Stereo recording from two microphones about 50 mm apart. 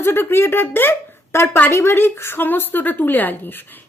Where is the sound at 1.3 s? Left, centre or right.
Left.